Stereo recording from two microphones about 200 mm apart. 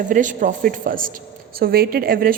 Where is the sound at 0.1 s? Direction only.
40° right (ahead or behind).